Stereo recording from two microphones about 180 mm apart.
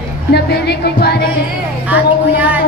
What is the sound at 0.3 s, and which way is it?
Speech, 65° left (ahead or behind).